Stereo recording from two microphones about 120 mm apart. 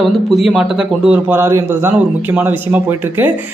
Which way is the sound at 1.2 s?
20° right (ahead or behind).